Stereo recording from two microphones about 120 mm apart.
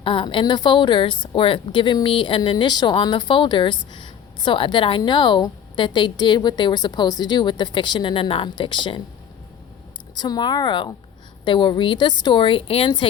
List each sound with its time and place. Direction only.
0.0 s a woman's voice: 45° left (ahead or behind)
10.2 s a woman's voice: 35° left (ahead or behind)